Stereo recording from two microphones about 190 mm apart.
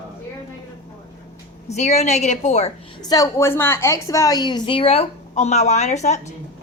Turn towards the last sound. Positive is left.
turn(degrees=40)  # may be behind; listen again after turning